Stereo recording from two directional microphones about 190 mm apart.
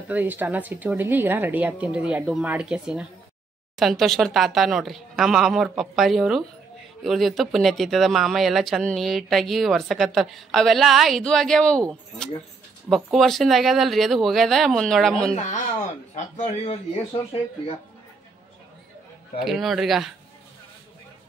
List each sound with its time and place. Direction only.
0.1 s a woman's voice: 10° right (ahead or behind)
12.9 s speech: centre (ahead or behind)
15.3 s speech: 40° left (ahead or behind)
19.4 s speech: centre (ahead or behind)